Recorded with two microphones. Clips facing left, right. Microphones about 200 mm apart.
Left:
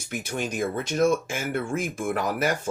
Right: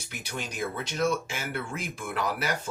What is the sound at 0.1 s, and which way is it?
Speech, 50° left (ahead or behind).